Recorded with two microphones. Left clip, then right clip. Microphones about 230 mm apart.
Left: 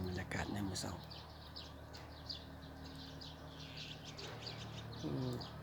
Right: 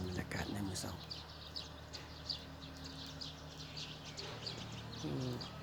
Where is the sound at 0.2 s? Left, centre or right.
Centre.